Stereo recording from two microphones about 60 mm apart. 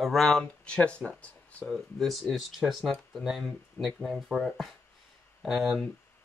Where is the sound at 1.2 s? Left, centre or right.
Left.